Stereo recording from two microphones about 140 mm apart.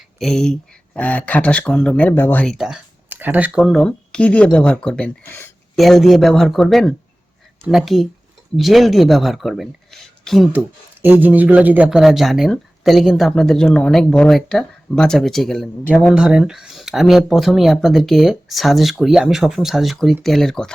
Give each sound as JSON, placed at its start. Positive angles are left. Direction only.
{"t": 0.2, "sound": "speech", "side_deg": 5}
{"t": 2.6, "sound": "speech", "side_deg": -5}
{"t": 5.7, "sound": "speech", "side_deg": 0}
{"t": 11.0, "sound": "speech", "side_deg": -10}
{"t": 16.1, "sound": "speech", "side_deg": -5}